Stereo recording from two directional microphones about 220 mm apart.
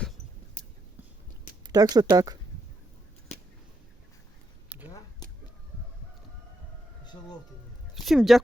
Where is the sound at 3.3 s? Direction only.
30° left (ahead or behind).